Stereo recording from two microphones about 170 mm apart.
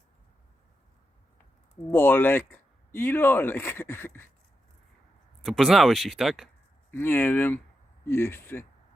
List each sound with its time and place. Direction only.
1.7 s speech: 10° left (ahead or behind)
5.4 s speech: centre (ahead or behind)
6.9 s speech: 15° left (ahead or behind)